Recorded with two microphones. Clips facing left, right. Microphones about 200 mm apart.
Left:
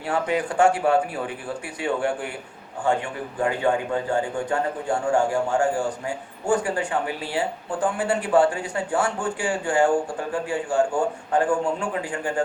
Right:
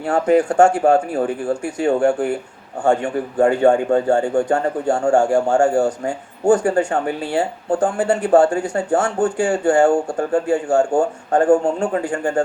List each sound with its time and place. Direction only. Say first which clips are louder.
0.0 s speech: right 9 dB; 45° right (ahead or behind)